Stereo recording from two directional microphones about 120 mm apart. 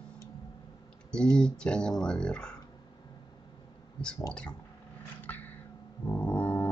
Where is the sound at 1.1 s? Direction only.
5° left (ahead or behind).